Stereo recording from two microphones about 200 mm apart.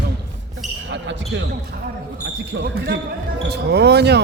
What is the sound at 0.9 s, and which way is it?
Basketball bounce, 65° right (ahead or behind).